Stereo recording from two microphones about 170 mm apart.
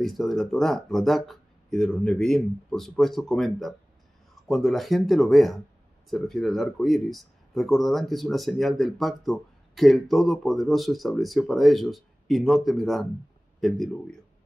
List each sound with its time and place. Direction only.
0.0 s speech: centre (ahead or behind)